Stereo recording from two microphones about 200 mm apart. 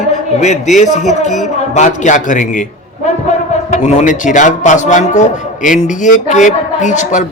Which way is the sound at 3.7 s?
35° left (ahead or behind).